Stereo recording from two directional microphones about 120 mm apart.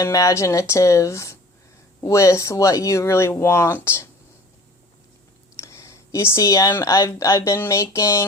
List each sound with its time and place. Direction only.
0.0 s speech: 25° left (ahead or behind)
5.5 s speech: 25° left (ahead or behind)